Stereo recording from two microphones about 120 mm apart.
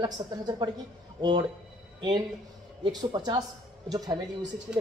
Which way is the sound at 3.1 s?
40° right (ahead or behind).